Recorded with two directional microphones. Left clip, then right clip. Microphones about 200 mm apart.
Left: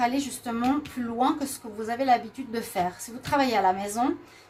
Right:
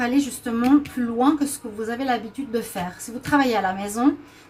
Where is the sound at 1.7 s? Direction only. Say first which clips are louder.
Left 2 dB; 40° left (ahead or behind).